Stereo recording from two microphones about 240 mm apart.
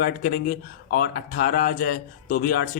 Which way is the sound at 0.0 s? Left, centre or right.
Left.